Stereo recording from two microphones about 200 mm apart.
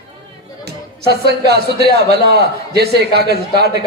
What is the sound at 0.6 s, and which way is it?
Speech, 55° right (ahead or behind).